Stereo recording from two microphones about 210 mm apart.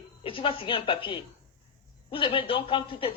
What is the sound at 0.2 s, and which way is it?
A woman's voice, 25° left (ahead or behind).